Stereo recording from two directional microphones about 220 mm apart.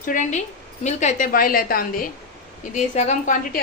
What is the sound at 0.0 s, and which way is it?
A woman's voice, 35° left (ahead or behind).